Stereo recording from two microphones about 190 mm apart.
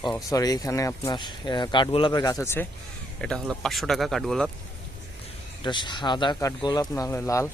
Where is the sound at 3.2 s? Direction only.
5° left (ahead or behind).